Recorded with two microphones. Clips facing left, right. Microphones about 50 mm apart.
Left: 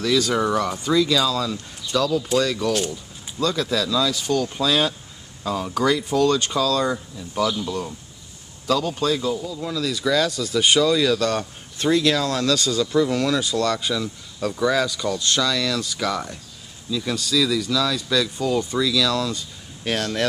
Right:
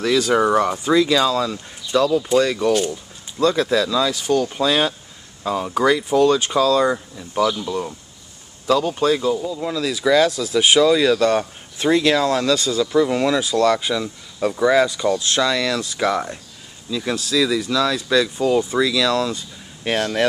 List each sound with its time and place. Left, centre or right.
0.0 s speech: centre
1.5 s speech: centre
3.4 s speech: right
3.7 s speech: centre
15.4 s speech: right